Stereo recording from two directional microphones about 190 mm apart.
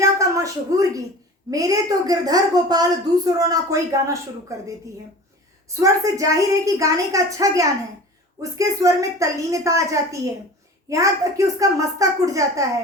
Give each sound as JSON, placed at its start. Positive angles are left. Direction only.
{"t": 0.0, "sound": "a sound", "side_deg": -15}
{"t": 1.5, "sound": "a woman's voice", "side_deg": -20}
{"t": 5.6, "sound": "a woman's voice", "side_deg": -15}